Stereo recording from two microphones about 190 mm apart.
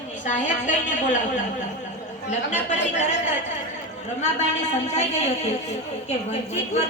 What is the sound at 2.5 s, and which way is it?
Speech, 40° left (ahead or behind).